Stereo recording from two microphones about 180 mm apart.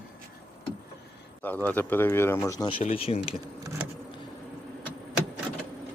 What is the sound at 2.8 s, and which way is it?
Speech, 35° left (ahead or behind).